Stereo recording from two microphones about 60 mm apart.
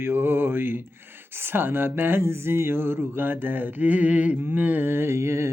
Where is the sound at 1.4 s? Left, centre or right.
Right.